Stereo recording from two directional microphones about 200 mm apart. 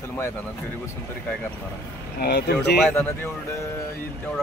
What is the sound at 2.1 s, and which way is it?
Speech, 55° left (ahead or behind).